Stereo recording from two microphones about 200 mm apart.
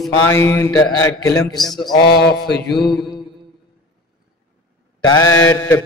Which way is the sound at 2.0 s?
50° left (ahead or behind).